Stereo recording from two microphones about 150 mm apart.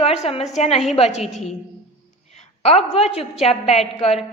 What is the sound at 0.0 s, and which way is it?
A woman's voice, 40° left (ahead or behind).